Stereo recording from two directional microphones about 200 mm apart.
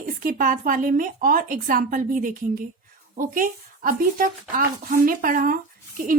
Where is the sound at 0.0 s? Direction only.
45° right (ahead or behind).